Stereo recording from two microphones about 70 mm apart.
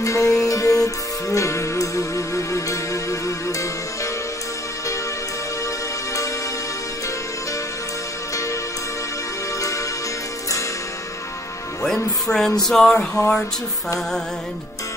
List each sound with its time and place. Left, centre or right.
0.0 s music: left
11.8 s music: centre